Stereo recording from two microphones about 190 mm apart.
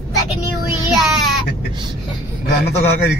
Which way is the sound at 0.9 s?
Centre (ahead or behind).